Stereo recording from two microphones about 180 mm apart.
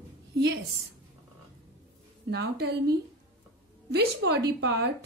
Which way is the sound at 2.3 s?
65° right (ahead or behind).